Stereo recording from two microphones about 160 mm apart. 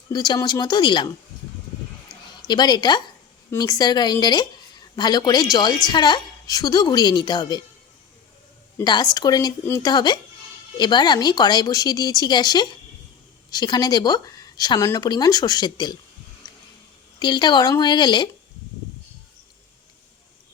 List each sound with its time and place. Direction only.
0.1 s a woman's voice: 25° left (ahead or behind)
2.5 s a woman's voice: 25° left (ahead or behind)
8.8 s a woman's voice: 25° left (ahead or behind)
16.4 s a sound: 25° left (ahead or behind)
17.2 s a woman's voice: 30° left (ahead or behind)